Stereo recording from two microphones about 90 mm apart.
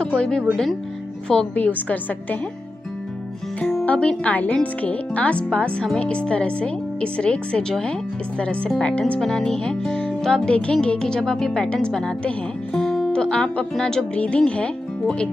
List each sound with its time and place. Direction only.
0.0 s speech: 10° left (ahead or behind)
1.5 s music: 20° left (ahead or behind)
3.8 s music: 15° left (ahead or behind)